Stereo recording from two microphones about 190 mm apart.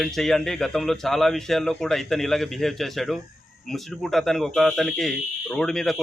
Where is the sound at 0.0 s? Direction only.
Centre (ahead or behind).